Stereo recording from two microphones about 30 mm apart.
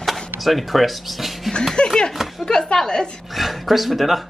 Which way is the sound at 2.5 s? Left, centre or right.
Left.